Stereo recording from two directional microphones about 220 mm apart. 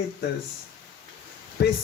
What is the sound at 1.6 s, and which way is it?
Speech, 50° left (ahead or behind).